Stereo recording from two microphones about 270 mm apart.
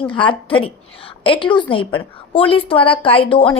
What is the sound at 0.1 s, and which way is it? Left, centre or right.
A woman's voice, centre.